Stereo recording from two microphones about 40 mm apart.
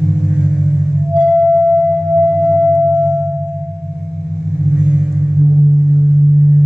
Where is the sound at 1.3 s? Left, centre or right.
Centre.